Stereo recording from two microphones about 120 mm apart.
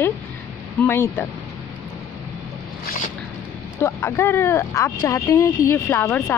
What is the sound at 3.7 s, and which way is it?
Speech, 20° left (ahead or behind).